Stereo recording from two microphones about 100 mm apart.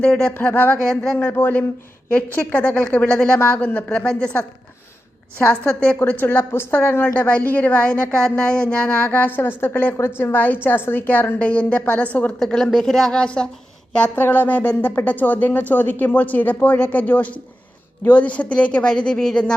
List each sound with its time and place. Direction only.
0.0 s a woman's voice: 10° left (ahead or behind)
0.9 s speech: 5° left (ahead or behind)
1.2 s a woman's voice: 20° left (ahead or behind)
6.0 s a woman's voice: 20° left (ahead or behind)